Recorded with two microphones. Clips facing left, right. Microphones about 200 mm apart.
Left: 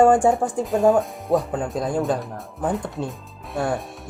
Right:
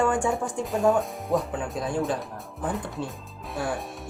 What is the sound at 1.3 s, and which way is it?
Speech, 35° left (ahead or behind).